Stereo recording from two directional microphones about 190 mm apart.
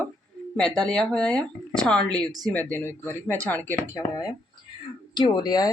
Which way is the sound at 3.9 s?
20° left (ahead or behind).